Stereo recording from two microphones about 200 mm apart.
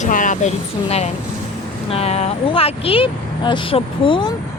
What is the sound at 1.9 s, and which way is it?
Speech, 30° left (ahead or behind).